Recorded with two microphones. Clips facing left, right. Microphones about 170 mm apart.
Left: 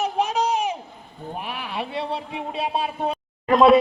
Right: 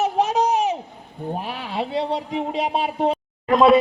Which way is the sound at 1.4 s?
30° right (ahead or behind).